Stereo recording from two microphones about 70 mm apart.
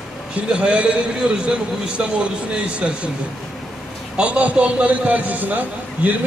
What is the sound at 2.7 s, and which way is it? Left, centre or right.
Speech, centre.